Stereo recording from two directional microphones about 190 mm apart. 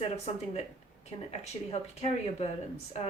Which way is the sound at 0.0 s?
30° left (ahead or behind).